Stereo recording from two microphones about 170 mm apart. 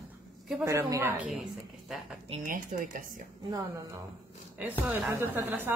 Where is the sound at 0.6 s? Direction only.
15° right (ahead or behind).